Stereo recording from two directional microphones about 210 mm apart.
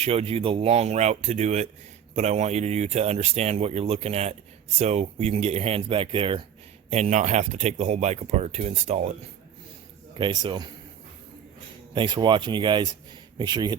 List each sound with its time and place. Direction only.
0.0 s speech: 30° right (ahead or behind)
10.2 s speech: 25° right (ahead or behind)
11.9 s speech: 20° right (ahead or behind)